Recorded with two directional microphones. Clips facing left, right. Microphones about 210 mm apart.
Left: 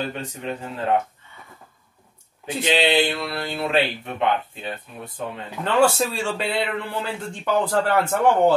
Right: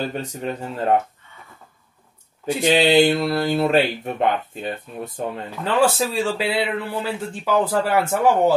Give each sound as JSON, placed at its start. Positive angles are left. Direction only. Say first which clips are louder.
{"t": 0.1, "sound": "speech", "louder": "right 3 dB", "side_deg": -40}
{"t": 2.6, "sound": "speech", "louder": "right 5 dB", "side_deg": -45}
{"t": 5.6, "sound": "a man's voice", "louder": "even", "side_deg": 0}